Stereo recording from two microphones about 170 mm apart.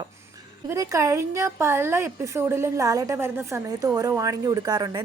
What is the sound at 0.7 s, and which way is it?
A woman's voice, 20° right (ahead or behind).